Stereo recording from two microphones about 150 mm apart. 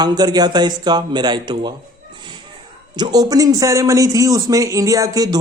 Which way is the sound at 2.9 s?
25° right (ahead or behind).